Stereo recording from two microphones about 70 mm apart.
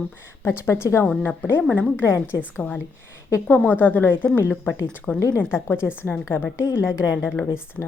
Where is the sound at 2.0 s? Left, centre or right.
Left.